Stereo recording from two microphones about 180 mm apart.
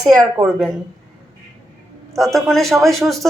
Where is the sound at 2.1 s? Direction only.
Centre (ahead or behind).